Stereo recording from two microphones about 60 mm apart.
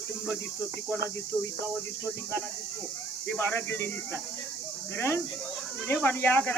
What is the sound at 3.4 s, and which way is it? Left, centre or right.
Speech, left.